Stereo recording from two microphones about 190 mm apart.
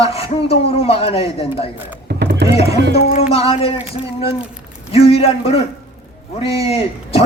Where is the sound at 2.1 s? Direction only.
60° right (ahead or behind).